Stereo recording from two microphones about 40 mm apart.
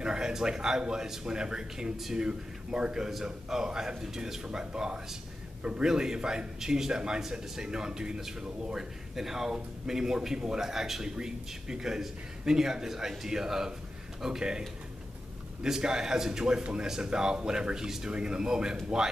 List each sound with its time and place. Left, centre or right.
0.0 s a man's voice: centre
15.6 s a man's voice: centre